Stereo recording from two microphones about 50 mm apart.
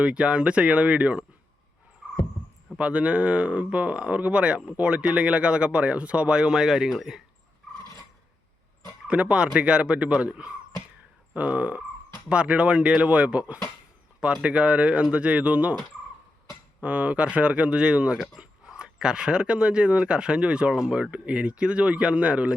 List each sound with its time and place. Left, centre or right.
0.0 s speech: right
2.7 s speech: right
9.0 s speech: right
16.8 s speech: right